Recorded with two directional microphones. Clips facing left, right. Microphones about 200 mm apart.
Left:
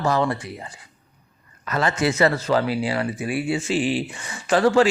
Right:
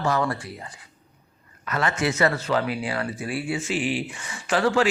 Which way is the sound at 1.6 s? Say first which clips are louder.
Left 3 dB; 35° left (ahead or behind).